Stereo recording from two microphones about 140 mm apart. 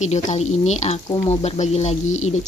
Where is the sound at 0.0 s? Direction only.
55° left (ahead or behind).